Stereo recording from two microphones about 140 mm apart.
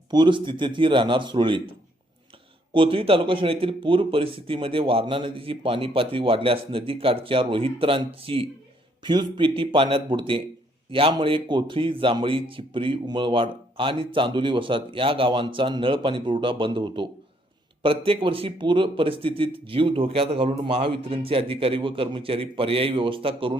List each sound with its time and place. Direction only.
0.1 s speech: 35° right (ahead or behind)
2.7 s speech: 40° right (ahead or behind)